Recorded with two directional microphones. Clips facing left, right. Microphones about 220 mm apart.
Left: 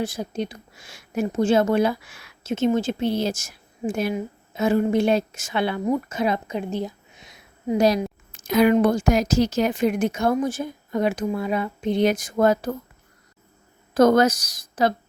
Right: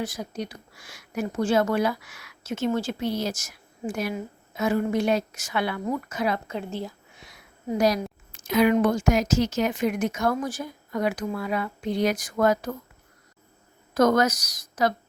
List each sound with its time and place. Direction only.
0.0 s speech: 25° left (ahead or behind)
8.3 s a woman's voice: 40° left (ahead or behind); by 12.7 s 25° left (ahead or behind)
13.9 s speech: 30° left (ahead or behind)